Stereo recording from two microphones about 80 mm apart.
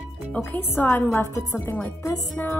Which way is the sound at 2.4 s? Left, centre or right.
Left.